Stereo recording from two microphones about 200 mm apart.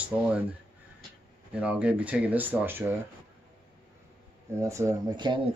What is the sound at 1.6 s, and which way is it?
Speech, 5° right (ahead or behind).